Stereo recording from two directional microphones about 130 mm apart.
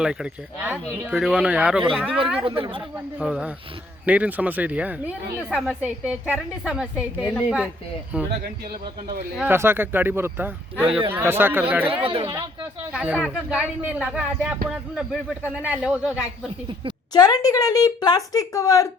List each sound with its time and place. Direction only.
0.0 s speech: 5° right (ahead or behind)
1.9 s speech: 5° left (ahead or behind)
2.4 s speech: 40° right (ahead or behind)
3.2 s speech: 5° right (ahead or behind)
9.4 s speech: 15° right (ahead or behind)
10.8 s speech: 45° right (ahead or behind)
11.1 s speech: 15° right (ahead or behind)
12.9 s speech: 5° right (ahead or behind)
17.1 s speech: 30° left (ahead or behind)